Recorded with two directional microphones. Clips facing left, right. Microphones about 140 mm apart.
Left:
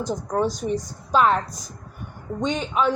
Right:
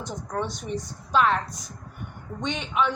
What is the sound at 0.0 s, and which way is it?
A woman's voice, 40° left (ahead or behind).